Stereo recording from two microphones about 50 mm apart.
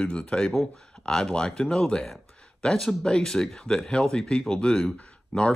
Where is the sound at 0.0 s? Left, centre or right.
Centre.